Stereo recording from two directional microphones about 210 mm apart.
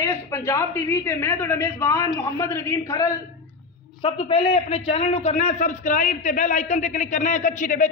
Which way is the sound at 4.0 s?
25° left (ahead or behind).